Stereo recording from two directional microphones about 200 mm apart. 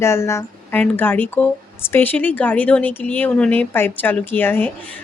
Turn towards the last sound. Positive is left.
turn(degrees=10)  # may be behind; listen again after turning